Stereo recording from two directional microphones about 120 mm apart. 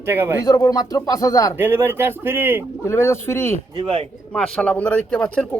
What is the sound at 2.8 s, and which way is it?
Speech, 25° left (ahead or behind).